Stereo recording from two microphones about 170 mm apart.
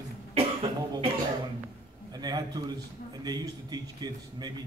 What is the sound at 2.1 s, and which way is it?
A man's voice, 25° right (ahead or behind).